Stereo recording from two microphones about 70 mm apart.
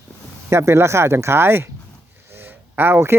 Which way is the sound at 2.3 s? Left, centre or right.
Right.